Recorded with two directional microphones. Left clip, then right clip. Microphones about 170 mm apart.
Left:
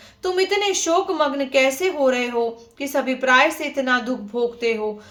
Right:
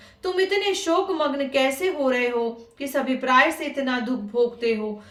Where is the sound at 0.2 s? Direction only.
30° left (ahead or behind).